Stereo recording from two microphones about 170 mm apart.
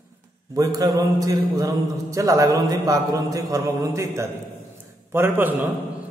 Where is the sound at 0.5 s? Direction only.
20° right (ahead or behind).